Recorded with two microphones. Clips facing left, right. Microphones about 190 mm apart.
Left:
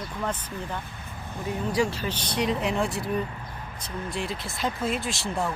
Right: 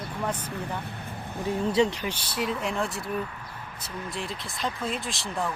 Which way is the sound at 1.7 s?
20° right (ahead or behind).